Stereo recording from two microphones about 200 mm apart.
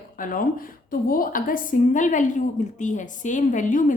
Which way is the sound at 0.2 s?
45° left (ahead or behind).